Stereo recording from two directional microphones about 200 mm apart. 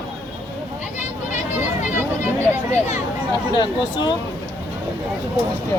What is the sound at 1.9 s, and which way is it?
Speech, 10° right (ahead or behind).